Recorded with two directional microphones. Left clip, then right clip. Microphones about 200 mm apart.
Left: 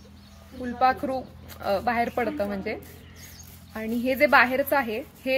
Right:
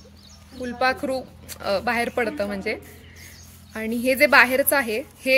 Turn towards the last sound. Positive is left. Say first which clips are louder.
# right 6 dB
turn(degrees=-35)  # may be behind; listen again after turning